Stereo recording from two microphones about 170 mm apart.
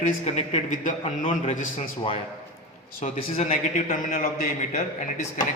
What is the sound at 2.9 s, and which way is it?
A man's voice, 40° left (ahead or behind).